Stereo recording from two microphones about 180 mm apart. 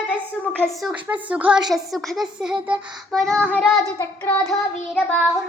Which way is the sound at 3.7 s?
20° left (ahead or behind).